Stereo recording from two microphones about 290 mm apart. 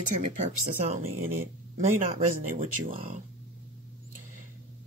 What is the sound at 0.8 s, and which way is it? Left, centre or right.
Speech, right.